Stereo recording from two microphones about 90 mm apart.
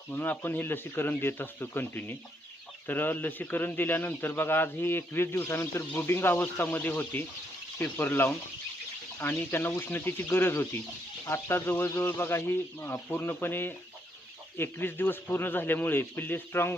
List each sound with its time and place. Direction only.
0.1 s a man's voice: 20° left (ahead or behind)